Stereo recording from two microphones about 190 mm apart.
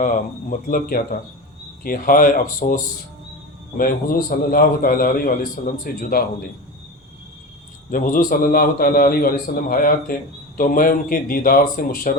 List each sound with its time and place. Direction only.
0.0 s a man's voice: 45° left (ahead or behind)
7.9 s a man's voice: 45° left (ahead or behind)